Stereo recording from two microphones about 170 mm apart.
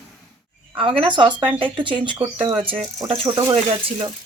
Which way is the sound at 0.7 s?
30° right (ahead or behind).